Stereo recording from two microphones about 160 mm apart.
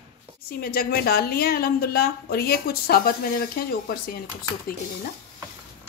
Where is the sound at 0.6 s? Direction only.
70° left (ahead or behind).